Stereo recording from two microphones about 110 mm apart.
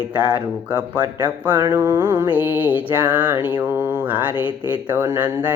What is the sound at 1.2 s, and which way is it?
Mantra, 15° right (ahead or behind).